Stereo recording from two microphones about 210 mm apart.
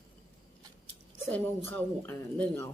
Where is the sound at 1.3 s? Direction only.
10° left (ahead or behind).